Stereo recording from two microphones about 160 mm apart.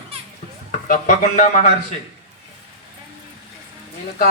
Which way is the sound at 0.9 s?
50° left (ahead or behind).